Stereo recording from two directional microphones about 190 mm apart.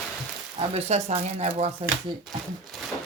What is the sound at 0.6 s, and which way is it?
Speech, 35° right (ahead or behind).